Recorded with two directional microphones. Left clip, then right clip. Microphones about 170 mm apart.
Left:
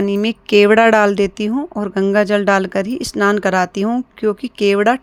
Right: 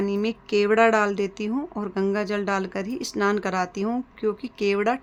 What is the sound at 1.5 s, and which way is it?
Speech, 30° left (ahead or behind).